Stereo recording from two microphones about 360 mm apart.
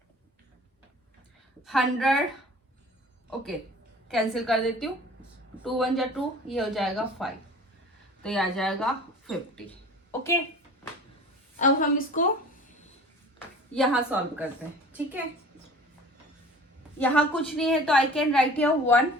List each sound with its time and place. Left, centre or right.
1.6 s a woman's voice: centre
4.1 s a woman's voice: centre
11.6 s a woman's voice: left
13.7 s a woman's voice: centre
17.0 s a woman's voice: centre